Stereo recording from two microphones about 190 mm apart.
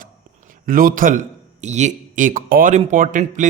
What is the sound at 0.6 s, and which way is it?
A man's voice, 50° right (ahead or behind).